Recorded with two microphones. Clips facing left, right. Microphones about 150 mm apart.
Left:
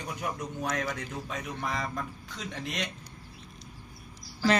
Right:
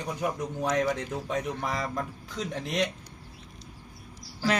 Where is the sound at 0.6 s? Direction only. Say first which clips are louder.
Right 6 dB; 30° right (ahead or behind).